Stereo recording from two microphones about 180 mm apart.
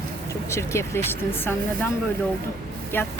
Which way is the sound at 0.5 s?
15° left (ahead or behind).